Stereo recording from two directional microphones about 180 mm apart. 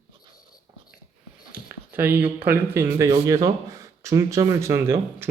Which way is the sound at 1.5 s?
10° right (ahead or behind).